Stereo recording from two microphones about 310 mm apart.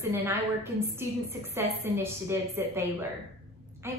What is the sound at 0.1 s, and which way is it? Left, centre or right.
Speech, centre.